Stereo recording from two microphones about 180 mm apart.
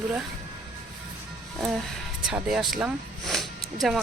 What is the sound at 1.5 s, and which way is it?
Music, centre (ahead or behind).